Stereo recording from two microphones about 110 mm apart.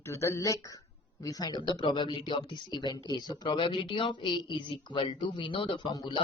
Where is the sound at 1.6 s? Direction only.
45° left (ahead or behind).